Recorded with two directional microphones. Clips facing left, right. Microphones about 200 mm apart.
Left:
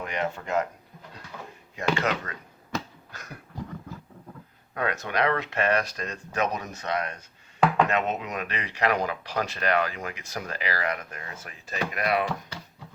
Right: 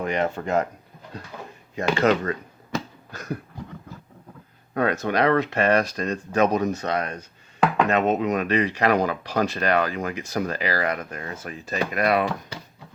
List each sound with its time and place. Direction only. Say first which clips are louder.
0.0 s speech: right 6 dB; 40° right (ahead or behind)
1.7 s speech: right 6 dB; 30° right (ahead or behind)
3.1 s a sound: right 12 dB; 35° right (ahead or behind)
4.7 s speech: right 6 dB; 35° right (ahead or behind)